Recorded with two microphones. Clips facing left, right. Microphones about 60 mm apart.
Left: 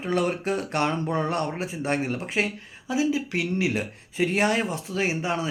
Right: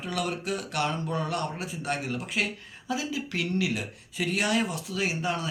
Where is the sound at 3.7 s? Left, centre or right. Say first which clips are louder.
Left 4 dB; left.